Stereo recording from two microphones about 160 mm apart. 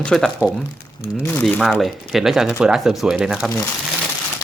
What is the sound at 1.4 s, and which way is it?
Speech, centre (ahead or behind).